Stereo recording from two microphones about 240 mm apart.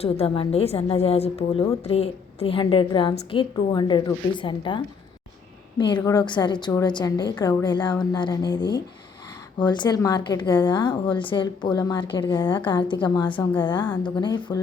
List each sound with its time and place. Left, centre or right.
0.0 s a woman's voice: left